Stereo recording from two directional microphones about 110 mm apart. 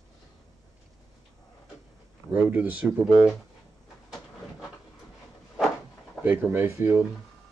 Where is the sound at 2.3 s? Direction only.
15° right (ahead or behind).